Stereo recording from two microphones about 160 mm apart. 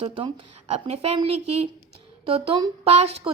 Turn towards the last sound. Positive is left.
turn(degrees=-40)  # may be behind; listen again after turning